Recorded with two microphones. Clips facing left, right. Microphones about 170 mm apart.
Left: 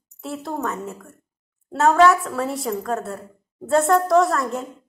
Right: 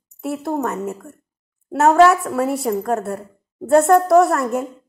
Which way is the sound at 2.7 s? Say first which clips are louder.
Right 5 dB; 40° right (ahead or behind).